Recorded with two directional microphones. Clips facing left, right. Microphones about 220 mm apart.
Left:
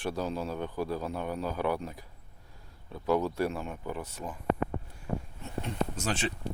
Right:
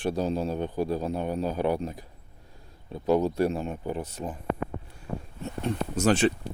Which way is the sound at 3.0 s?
20° right (ahead or behind).